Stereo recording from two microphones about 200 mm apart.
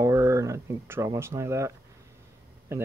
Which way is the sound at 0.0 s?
15° right (ahead or behind).